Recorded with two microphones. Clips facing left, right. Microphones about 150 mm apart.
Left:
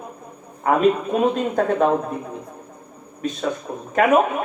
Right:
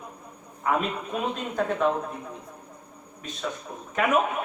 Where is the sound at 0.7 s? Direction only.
45° left (ahead or behind).